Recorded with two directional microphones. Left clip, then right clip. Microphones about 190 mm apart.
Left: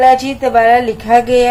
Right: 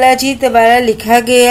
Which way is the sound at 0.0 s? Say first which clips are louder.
Even; 30° right (ahead or behind).